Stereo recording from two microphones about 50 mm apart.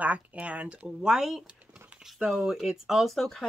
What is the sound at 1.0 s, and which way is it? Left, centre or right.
Speech, centre.